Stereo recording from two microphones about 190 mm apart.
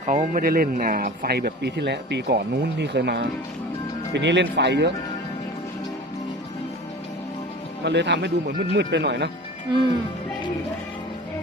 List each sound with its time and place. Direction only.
0.0 s speech: 40° right (ahead or behind); by 4.9 s 65° right (ahead or behind)
7.9 s speech: 65° right (ahead or behind)